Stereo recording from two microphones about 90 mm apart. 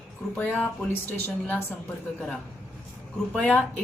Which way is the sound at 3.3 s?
15° left (ahead or behind).